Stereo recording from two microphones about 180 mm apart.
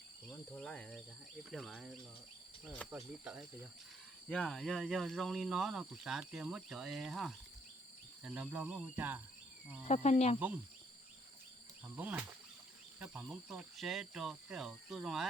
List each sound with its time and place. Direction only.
0.5 s speech: 5° left (ahead or behind)
4.3 s speech: 5° left (ahead or behind); by 9.2 s 10° right (ahead or behind)
9.8 s speech: 40° left (ahead or behind)
11.9 s speech: 10° right (ahead or behind)